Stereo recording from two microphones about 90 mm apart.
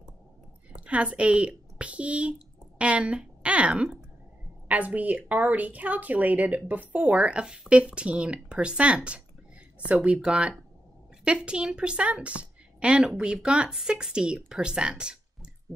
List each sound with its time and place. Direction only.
0.8 s a woman's voice: 15° right (ahead or behind)